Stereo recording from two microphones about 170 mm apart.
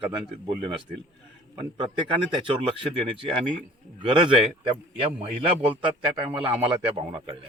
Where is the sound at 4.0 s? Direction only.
30° right (ahead or behind).